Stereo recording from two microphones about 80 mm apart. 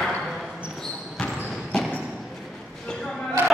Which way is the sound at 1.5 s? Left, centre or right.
Centre.